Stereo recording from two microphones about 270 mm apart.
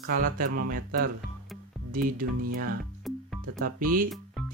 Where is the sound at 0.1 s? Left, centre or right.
Right.